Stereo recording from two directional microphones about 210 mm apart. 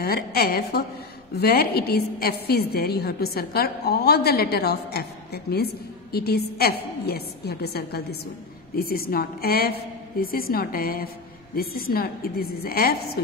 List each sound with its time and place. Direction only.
0.0 s a woman's voice: 45° left (ahead or behind)